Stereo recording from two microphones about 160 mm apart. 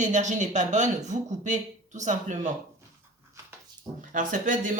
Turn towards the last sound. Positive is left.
turn(degrees=-55)  # may be behind; listen again after turning